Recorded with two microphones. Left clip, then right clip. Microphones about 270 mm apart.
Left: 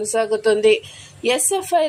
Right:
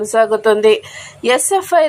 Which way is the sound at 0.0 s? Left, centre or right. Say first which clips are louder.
Right 6 dB; centre.